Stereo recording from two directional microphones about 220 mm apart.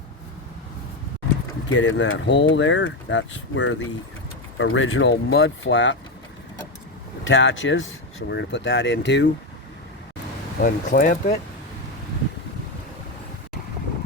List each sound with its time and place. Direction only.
1.7 s speech: 55° left (ahead or behind)
7.3 s speech: 60° left (ahead or behind)
10.6 s speech: 40° left (ahead or behind)